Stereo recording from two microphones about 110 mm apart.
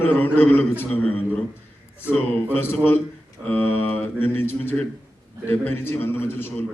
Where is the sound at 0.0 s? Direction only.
15° left (ahead or behind).